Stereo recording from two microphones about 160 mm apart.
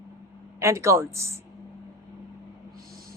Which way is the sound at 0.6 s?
20° right (ahead or behind).